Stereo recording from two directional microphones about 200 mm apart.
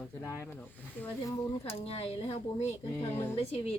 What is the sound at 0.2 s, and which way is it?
Speech, 10° left (ahead or behind).